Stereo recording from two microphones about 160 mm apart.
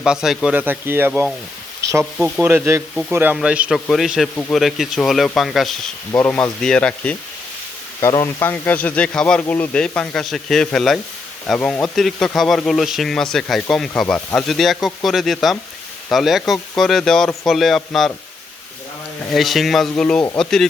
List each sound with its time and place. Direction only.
0.0 s speech: 5° right (ahead or behind)
4.4 s speech: 10° left (ahead or behind)
4.6 s speech: centre (ahead or behind)
6.1 s speech: 10° left (ahead or behind)
8.0 s speech: 20° left (ahead or behind); by 18.1 s centre (ahead or behind)
19.3 s speech: centre (ahead or behind)